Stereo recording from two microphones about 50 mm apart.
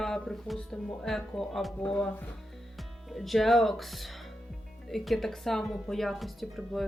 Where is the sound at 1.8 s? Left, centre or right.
Left.